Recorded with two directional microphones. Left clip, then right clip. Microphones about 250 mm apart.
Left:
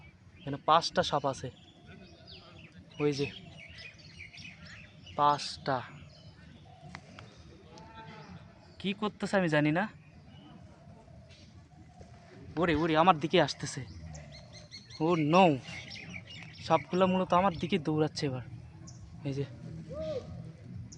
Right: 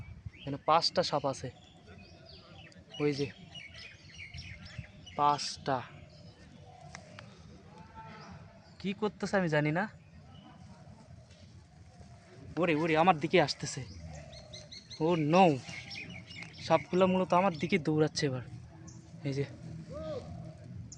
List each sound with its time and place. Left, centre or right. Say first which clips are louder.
0.4 s speech: left 1 dB; centre
3.0 s speech: left 1 dB; centre
5.1 s speech: left 1 dB; centre
8.8 s speech: even; centre
12.5 s speech: left 1 dB; centre
14.9 s speech: left 1 dB; centre
16.6 s speech: even; centre
19.9 s a sound: left 4 dB; centre